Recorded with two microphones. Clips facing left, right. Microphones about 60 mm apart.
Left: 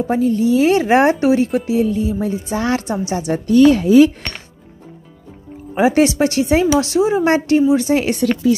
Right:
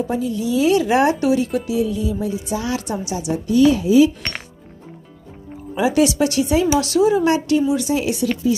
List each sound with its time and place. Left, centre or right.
0.0 s a woman's voice: left
5.8 s a woman's voice: left
7.3 s a woman's voice: left
7.9 s a woman's voice: left